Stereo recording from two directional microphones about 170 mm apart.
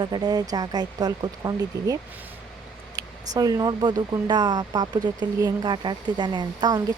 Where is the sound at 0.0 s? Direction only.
25° right (ahead or behind).